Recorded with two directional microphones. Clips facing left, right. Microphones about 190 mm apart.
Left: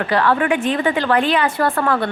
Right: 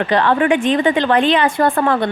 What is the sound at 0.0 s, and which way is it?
A woman's voice, 25° right (ahead or behind).